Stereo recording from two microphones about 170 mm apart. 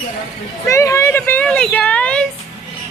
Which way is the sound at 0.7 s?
15° left (ahead or behind).